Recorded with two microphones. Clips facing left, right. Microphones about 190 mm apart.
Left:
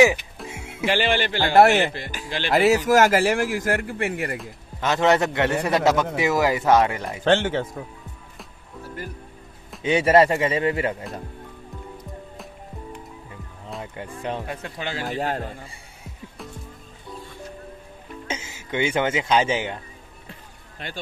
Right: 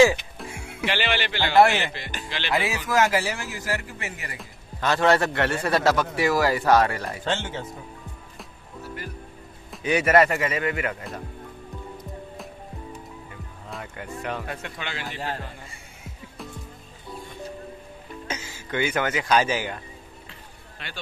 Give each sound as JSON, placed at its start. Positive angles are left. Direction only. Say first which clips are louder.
{"t": 0.5, "sound": "music", "louder": "left 3 dB", "side_deg": 20}
{"t": 0.8, "sound": "speech", "louder": "left 5 dB", "side_deg": 45}
{"t": 4.7, "sound": "a man's voice", "louder": "left 1 dB", "side_deg": 20}
{"t": 7.2, "sound": "speech", "louder": "left 10 dB", "side_deg": 65}
{"t": 9.8, "sound": "speech", "louder": "left 3 dB", "side_deg": 25}
{"t": 13.7, "sound": "music", "louder": "left 2 dB", "side_deg": 25}
{"t": 14.2, "sound": "speech", "louder": "left 3 dB", "side_deg": 30}
{"t": 18.2, "sound": "speech", "louder": "left 2 dB", "side_deg": 20}